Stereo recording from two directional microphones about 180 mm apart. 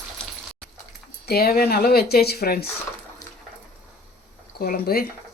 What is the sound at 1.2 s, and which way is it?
Speech, 60° left (ahead or behind).